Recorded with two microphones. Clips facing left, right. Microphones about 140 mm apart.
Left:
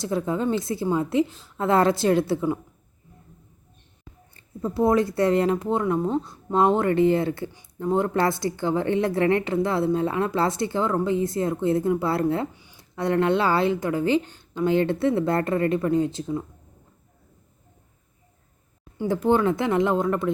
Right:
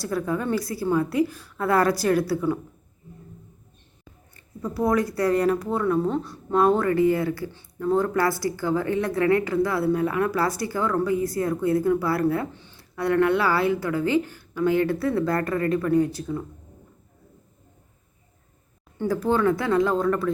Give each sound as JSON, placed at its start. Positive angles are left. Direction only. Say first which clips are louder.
{"t": 0.0, "sound": "speech", "louder": "left 1 dB", "side_deg": 20}
{"t": 4.4, "sound": "speech", "louder": "left 3 dB", "side_deg": 25}
{"t": 12.5, "sound": "a sound", "louder": "right 3 dB", "side_deg": 10}
{"t": 13.0, "sound": "speech", "louder": "right 1 dB", "side_deg": 20}
{"t": 19.0, "sound": "speech", "louder": "left 1 dB", "side_deg": 20}